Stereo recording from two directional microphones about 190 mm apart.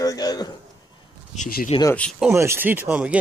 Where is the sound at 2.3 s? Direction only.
15° right (ahead or behind).